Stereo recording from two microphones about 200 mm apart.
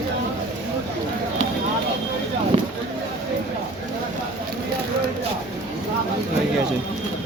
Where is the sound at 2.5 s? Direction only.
30° right (ahead or behind).